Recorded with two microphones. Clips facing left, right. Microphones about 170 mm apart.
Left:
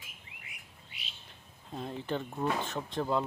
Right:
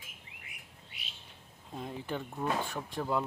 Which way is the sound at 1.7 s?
10° right (ahead or behind).